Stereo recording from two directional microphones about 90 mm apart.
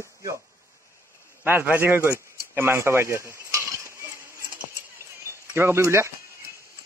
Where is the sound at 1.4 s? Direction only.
20° right (ahead or behind).